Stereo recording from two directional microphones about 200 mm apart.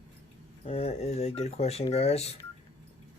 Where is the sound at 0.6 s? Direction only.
30° left (ahead or behind).